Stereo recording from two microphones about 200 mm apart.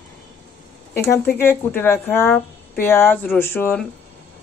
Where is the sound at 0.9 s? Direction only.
10° left (ahead or behind).